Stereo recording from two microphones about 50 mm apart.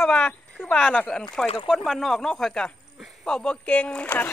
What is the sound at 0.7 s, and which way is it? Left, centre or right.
Speech, left.